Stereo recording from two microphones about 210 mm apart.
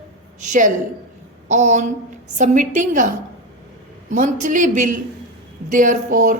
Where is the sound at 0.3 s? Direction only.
35° right (ahead or behind).